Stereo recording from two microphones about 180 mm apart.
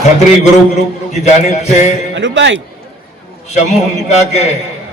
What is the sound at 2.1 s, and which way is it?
Speech, 90° right.